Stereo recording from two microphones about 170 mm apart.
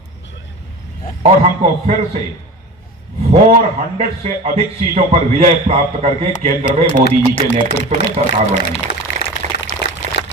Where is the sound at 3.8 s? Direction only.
40° right (ahead or behind).